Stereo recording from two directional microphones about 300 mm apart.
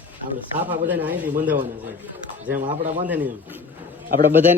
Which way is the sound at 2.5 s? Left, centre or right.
Right.